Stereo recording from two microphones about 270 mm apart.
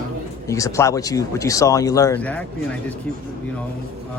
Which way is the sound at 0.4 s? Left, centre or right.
Centre.